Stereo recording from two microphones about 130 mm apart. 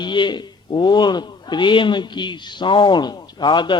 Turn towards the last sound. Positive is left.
turn(degrees=35)  # may be behind; listen again after turning